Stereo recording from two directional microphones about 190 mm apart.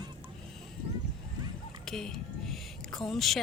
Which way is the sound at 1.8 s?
Centre (ahead or behind).